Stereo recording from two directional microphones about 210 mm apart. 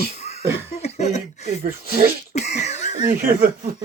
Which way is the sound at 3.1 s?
40° right (ahead or behind).